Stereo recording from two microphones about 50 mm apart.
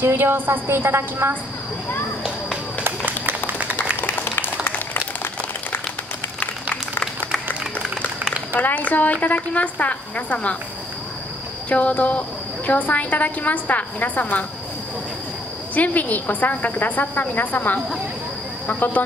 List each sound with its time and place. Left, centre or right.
0.0 s a woman's voice: right
3.3 s a sound: right
8.5 s a woman's voice: left
11.7 s a woman's voice: left
15.7 s a woman's voice: left